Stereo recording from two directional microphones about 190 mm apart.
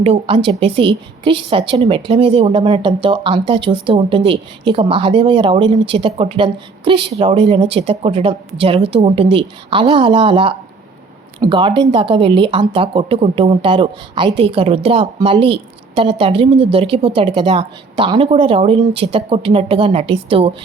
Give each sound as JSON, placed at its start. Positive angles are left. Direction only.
{"t": 0.0, "sound": "speech", "side_deg": -30}